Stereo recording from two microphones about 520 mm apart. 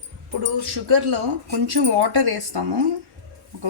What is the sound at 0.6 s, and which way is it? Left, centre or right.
Speech, right.